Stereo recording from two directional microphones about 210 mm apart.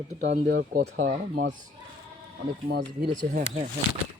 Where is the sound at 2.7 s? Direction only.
40° right (ahead or behind).